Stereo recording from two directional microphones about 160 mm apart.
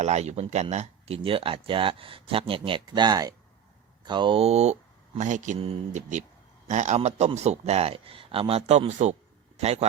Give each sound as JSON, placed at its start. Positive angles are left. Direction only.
{"t": 0.0, "sound": "speech", "side_deg": -45}